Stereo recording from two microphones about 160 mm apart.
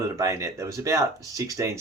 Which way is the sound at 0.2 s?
20° right (ahead or behind).